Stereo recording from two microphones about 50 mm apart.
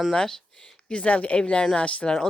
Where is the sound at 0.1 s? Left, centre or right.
Centre.